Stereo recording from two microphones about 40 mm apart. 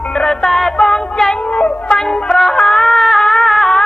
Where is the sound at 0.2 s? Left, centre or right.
Centre.